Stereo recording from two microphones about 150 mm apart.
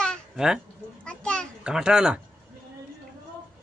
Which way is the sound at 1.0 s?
5° left (ahead or behind).